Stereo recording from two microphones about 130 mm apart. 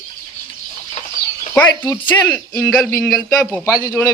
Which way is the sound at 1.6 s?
15° left (ahead or behind).